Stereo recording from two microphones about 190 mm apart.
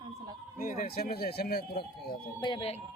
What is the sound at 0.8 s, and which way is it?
Speech, 50° left (ahead or behind).